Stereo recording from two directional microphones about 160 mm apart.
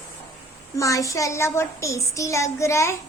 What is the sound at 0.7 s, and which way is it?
Speech, 20° left (ahead or behind).